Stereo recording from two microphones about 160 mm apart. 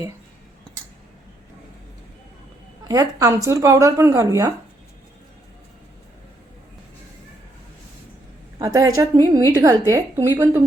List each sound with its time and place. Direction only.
2.8 s a woman's voice: 20° right (ahead or behind)
8.5 s a woman's voice: 25° right (ahead or behind)